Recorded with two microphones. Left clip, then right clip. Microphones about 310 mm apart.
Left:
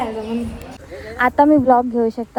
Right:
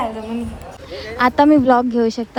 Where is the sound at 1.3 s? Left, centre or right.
Left.